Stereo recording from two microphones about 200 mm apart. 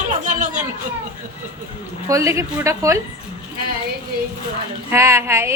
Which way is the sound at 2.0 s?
15° right (ahead or behind).